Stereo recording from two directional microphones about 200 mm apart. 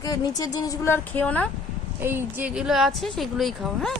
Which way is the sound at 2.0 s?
10° right (ahead or behind).